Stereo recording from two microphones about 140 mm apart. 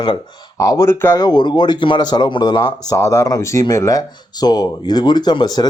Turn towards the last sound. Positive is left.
turn(degrees=30)  # may be behind; listen again after turning